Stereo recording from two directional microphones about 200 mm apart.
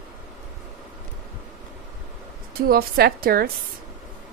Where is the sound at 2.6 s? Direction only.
50° right (ahead or behind).